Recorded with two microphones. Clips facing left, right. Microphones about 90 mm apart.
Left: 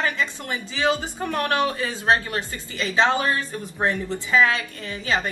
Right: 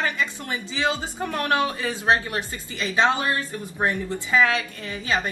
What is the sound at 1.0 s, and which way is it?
A woman's voice, 15° right (ahead or behind).